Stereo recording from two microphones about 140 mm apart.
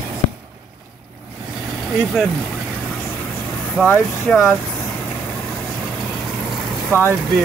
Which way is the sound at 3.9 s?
Centre (ahead or behind).